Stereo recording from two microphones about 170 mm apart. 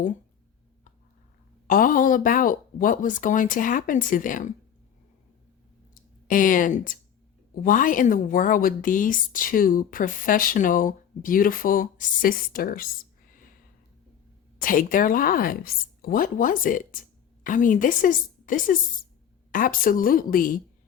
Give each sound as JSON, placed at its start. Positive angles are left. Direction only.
{"t": 1.6, "sound": "a woman's voice", "side_deg": 55}
{"t": 5.9, "sound": "a woman's voice", "side_deg": 55}
{"t": 14.6, "sound": "a woman's voice", "side_deg": 55}